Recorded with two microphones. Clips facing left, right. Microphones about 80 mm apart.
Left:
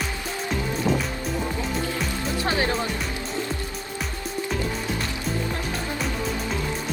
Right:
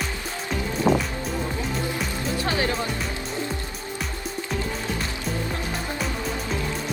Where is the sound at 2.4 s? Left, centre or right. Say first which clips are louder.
Left 1 dB; left.